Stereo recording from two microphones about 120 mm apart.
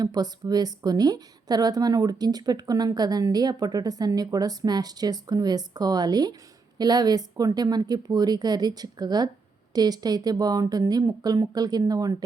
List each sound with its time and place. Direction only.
0.0 s a woman's voice: 35° right (ahead or behind)